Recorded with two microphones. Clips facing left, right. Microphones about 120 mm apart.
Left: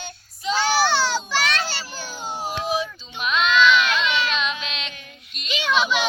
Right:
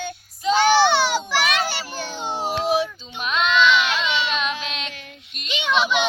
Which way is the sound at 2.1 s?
25° right (ahead or behind).